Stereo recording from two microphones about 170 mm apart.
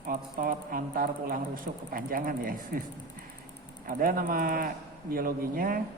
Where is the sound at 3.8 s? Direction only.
55° right (ahead or behind).